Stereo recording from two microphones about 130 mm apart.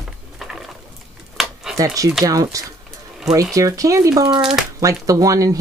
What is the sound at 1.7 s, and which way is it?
Speech, 25° right (ahead or behind).